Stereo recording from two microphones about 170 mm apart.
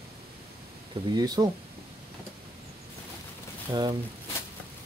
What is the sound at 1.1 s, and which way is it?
Speech, 25° right (ahead or behind).